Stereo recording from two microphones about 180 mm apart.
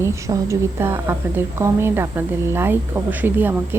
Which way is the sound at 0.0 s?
15° right (ahead or behind).